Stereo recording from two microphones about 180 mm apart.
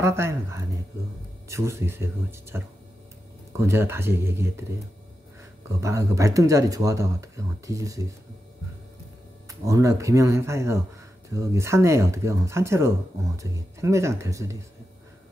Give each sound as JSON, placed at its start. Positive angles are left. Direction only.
{"t": 0.0, "sound": "speech", "side_deg": -15}
{"t": 5.8, "sound": "speech", "side_deg": -15}
{"t": 9.5, "sound": "speech", "side_deg": -20}